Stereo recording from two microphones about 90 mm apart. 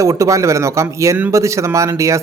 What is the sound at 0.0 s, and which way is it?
A man's voice, 35° right (ahead or behind).